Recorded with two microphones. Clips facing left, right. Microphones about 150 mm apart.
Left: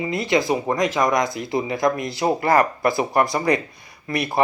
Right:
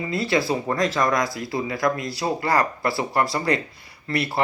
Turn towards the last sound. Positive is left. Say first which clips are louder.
# left 1 dB
turn(degrees=15)  # may be behind; listen again after turning